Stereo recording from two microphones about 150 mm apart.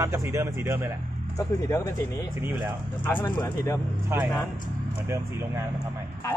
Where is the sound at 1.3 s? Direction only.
20° left (ahead or behind).